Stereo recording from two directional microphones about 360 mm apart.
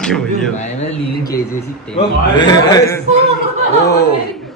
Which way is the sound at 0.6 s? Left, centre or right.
Centre.